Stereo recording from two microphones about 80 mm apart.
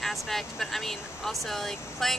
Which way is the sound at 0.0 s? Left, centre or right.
Centre.